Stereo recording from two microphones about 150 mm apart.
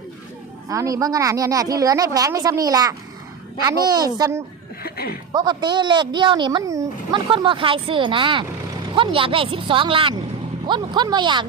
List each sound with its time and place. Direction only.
0.7 s speech: 25° right (ahead or behind)
4.8 s speech: 90° left
5.3 s speech: 30° right (ahead or behind)
7.3 s speech: 35° right (ahead or behind)